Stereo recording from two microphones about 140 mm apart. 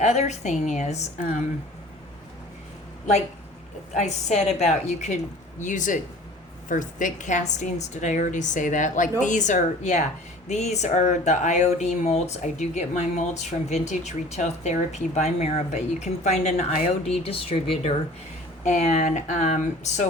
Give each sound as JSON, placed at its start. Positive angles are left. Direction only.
{"t": 0.0, "sound": "speech", "side_deg": 55}
{"t": 3.9, "sound": "speech", "side_deg": 55}
{"t": 18.6, "sound": "speech", "side_deg": 60}